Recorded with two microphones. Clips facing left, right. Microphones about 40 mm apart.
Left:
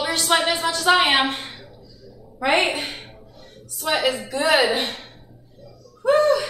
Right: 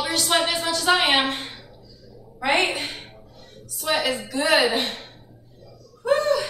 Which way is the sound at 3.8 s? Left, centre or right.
Left.